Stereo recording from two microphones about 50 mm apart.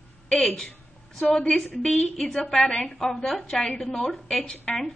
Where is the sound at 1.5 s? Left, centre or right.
Centre.